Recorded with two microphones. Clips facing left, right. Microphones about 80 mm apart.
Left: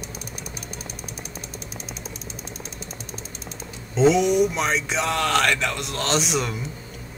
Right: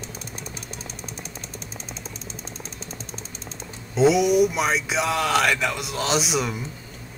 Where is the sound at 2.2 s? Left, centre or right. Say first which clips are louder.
Left 1 dB; right.